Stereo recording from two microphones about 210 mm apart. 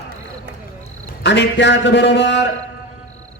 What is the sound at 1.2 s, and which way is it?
Speech, 55° left (ahead or behind).